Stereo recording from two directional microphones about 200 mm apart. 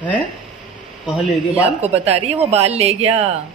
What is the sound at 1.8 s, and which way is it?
A woman's voice, 30° right (ahead or behind).